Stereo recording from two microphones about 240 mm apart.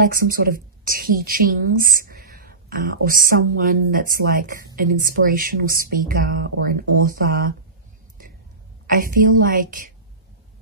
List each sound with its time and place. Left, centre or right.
0.0 s a woman's voice: right
8.8 s speech: right